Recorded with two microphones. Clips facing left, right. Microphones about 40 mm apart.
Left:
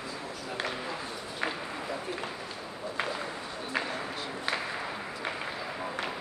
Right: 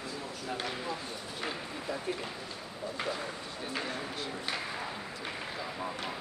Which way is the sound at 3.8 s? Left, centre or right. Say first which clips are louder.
Left 2 dB; left.